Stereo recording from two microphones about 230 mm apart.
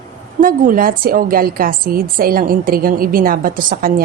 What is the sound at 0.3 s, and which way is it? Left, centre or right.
A woman's voice, right.